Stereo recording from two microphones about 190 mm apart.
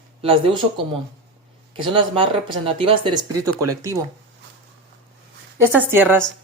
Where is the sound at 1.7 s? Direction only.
25° right (ahead or behind).